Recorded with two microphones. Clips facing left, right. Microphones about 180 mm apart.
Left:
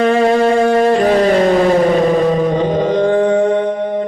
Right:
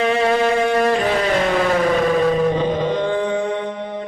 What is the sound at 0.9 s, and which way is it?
Vehicle, 40° left (ahead or behind).